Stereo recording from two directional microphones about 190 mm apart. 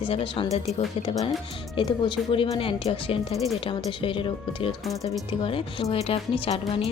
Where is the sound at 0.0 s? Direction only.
30° left (ahead or behind).